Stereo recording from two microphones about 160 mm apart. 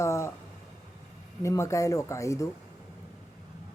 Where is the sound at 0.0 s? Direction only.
20° left (ahead or behind).